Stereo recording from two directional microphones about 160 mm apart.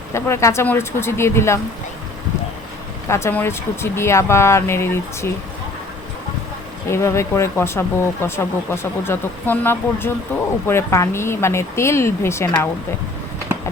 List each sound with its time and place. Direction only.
0.1 s speech: 15° left (ahead or behind)
3.1 s speech: 15° left (ahead or behind)
6.8 s speech: 15° left (ahead or behind)